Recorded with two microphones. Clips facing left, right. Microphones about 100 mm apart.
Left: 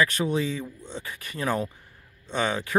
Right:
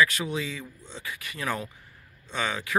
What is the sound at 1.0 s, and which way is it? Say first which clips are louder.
Speech: left 2 dB; 40° left (ahead or behind).